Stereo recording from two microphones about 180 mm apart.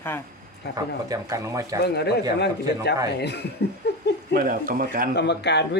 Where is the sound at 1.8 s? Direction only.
65° left (ahead or behind).